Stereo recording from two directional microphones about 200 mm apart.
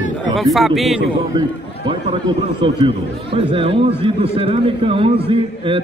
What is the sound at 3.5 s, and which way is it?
Speech, 25° right (ahead or behind).